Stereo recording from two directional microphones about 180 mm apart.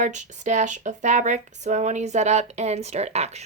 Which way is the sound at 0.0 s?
40° right (ahead or behind).